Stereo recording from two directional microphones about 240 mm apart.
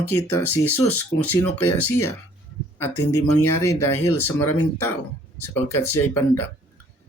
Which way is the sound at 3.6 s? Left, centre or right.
Centre.